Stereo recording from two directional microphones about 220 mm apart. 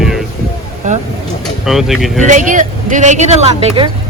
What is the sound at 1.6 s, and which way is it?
Speech, centre (ahead or behind).